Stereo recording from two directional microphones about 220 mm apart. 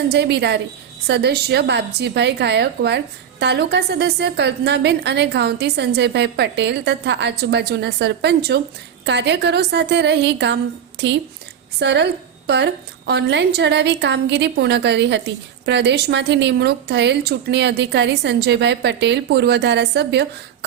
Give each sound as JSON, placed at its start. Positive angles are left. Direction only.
{"t": 0.1, "sound": "a woman's voice", "side_deg": -50}